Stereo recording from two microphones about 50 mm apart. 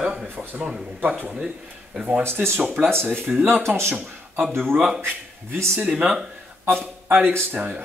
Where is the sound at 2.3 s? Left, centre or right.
Right.